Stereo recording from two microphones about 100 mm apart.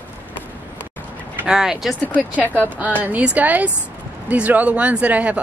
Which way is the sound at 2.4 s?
15° left (ahead or behind).